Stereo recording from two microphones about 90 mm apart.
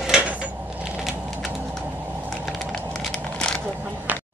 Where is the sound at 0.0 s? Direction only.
10° right (ahead or behind).